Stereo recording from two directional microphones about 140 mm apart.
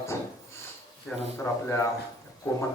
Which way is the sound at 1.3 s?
20° left (ahead or behind).